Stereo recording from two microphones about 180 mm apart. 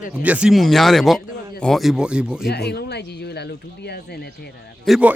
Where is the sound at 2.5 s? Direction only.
65° left (ahead or behind).